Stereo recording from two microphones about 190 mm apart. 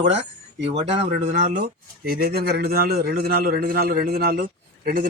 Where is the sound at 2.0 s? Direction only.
50° right (ahead or behind).